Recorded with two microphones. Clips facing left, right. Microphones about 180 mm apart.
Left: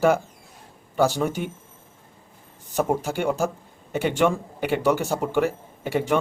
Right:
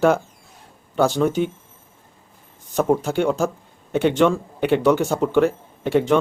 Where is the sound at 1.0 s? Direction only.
10° left (ahead or behind).